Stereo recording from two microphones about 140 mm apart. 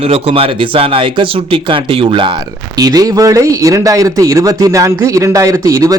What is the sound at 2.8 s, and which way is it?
Speech, 25° right (ahead or behind).